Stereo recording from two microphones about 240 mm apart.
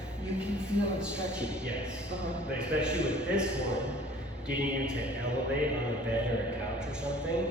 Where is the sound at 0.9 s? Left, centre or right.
Centre.